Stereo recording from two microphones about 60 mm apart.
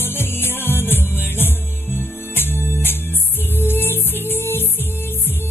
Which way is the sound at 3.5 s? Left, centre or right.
Left.